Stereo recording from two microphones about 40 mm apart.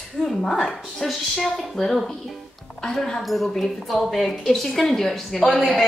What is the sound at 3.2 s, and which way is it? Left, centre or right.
A woman's voice, centre.